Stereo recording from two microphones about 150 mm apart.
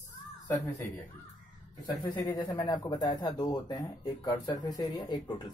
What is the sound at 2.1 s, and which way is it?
Speech, 25° left (ahead or behind).